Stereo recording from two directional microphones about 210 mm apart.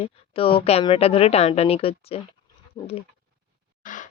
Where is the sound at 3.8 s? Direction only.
40° left (ahead or behind).